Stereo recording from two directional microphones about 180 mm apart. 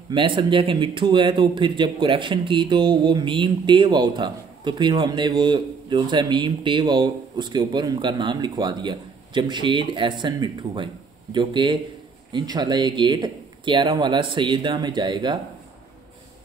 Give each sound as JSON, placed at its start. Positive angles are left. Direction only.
{"t": 0.1, "sound": "speech", "side_deg": -30}